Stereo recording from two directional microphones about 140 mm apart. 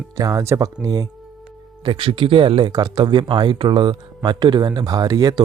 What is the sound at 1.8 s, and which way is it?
Speech, 35° right (ahead or behind).